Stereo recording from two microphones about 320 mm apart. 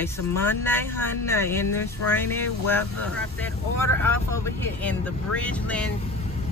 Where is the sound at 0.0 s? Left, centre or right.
Centre.